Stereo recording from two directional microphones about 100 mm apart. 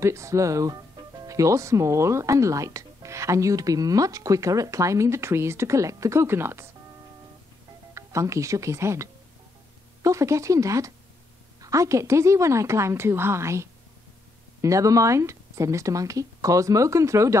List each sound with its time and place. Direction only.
0.0 s speech: 30° right (ahead or behind)
7.9 s a woman's voice: 30° right (ahead or behind)